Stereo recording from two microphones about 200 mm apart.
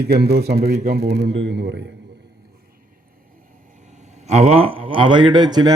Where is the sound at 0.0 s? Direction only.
55° right (ahead or behind).